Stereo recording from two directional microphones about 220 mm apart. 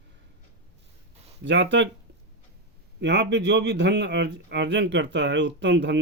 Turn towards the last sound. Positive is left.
turn(degrees=-55)  # may be behind; listen again after turning